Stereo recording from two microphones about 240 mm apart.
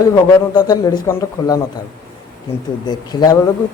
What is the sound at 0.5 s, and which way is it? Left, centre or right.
Speech, centre.